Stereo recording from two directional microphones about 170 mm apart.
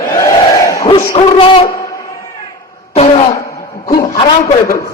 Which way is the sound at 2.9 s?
35° left (ahead or behind).